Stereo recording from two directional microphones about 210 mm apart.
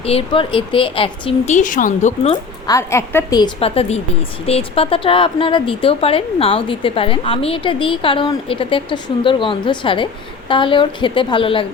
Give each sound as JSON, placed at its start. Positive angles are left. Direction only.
{"t": 0.0, "sound": "a woman's voice", "side_deg": 25}
{"t": 2.3, "sound": "a woman's voice", "side_deg": 15}